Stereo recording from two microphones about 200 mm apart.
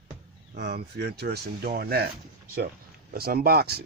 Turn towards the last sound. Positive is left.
turn(degrees=-50)  # may be behind; listen again after turning